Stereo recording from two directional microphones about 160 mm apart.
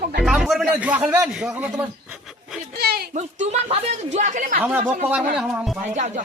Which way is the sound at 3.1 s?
45° right (ahead or behind).